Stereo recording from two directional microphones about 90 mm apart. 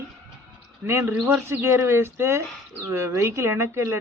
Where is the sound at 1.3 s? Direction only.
25° right (ahead or behind).